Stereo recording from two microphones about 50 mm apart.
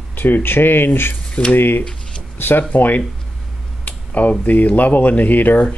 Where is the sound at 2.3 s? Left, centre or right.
Left.